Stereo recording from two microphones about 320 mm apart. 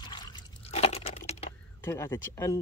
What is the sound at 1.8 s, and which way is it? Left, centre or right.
Speech, centre.